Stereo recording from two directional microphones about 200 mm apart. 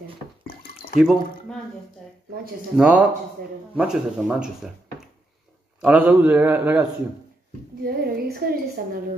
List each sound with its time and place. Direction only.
0.9 s speech: centre (ahead or behind)
2.8 s speech: 5° right (ahead or behind)
5.8 s a man's voice: 5° right (ahead or behind)
7.8 s a woman's voice: 50° right (ahead or behind)